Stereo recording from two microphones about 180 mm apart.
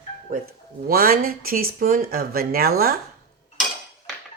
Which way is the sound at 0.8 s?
55° right (ahead or behind).